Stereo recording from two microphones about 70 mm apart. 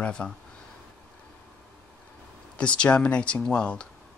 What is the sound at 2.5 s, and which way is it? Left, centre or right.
Speech, centre.